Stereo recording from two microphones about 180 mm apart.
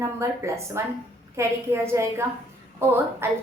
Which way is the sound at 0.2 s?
15° right (ahead or behind).